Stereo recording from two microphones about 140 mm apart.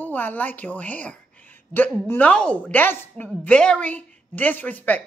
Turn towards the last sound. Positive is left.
turn(degrees=10)  # may be behind; listen again after turning